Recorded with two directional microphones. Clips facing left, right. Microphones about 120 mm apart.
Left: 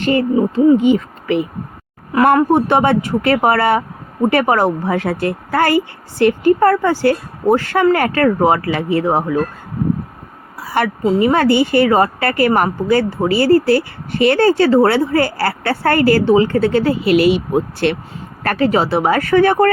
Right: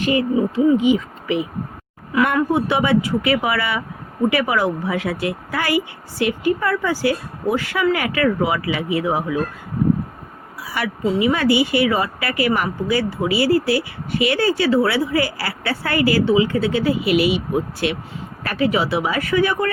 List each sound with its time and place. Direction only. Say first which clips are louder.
0.0 s speech: left 4 dB; 55° left (ahead or behind)
10.6 s speech: left 6 dB; 50° left (ahead or behind)